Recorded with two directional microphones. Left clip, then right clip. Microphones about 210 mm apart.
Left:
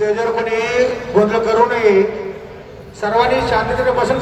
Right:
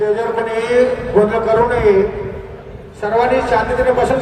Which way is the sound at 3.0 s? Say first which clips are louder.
Even; 10° right (ahead or behind).